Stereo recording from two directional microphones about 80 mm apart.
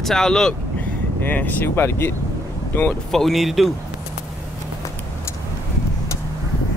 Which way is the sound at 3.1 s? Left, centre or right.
Centre.